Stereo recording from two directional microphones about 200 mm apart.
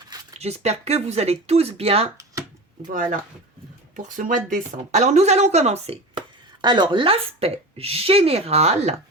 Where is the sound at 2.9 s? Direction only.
40° right (ahead or behind).